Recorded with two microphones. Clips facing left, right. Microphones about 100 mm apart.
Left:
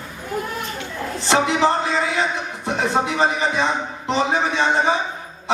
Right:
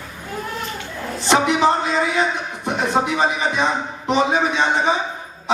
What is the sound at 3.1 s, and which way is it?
A man's voice, 15° right (ahead or behind).